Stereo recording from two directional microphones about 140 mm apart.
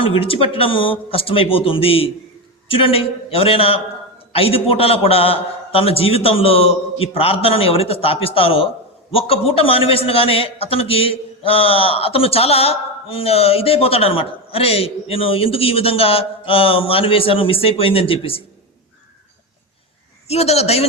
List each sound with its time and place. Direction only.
0.0 s a man's voice: 40° left (ahead or behind)
20.2 s a man's voice: 50° left (ahead or behind)